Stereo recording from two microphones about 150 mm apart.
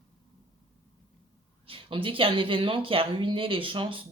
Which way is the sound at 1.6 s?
35° right (ahead or behind).